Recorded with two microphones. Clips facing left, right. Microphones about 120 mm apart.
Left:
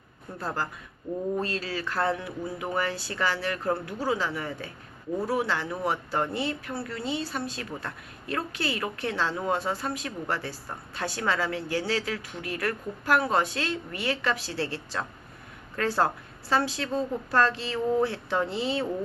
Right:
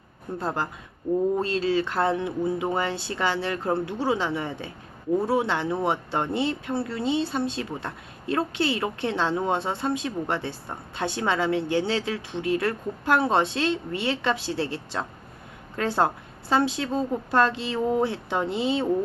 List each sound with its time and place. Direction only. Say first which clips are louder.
0.3 s speech: right 3 dB; 25° right (ahead or behind)